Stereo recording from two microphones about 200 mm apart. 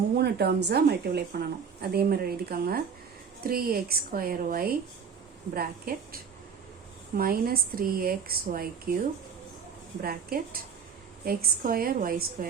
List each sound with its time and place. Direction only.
0.2 s a woman's voice: 55° right (ahead or behind)
7.2 s a woman's voice: 45° right (ahead or behind)
10.0 s a woman's voice: 50° right (ahead or behind)